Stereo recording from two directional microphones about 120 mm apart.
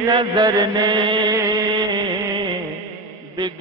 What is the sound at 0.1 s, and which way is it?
Music, 35° right (ahead or behind).